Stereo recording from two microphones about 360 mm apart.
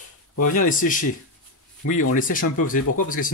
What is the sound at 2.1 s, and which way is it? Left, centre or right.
Speech, left.